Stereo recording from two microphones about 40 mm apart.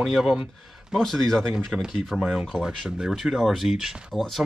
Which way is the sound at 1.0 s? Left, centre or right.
Centre.